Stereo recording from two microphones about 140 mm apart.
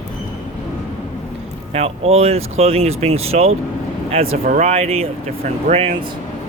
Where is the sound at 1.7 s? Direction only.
45° right (ahead or behind).